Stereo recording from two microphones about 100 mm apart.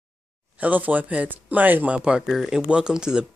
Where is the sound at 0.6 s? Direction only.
15° right (ahead or behind).